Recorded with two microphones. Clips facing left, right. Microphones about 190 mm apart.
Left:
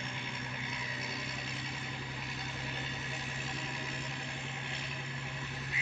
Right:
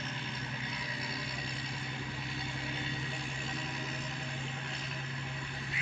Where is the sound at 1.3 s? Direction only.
5° left (ahead or behind).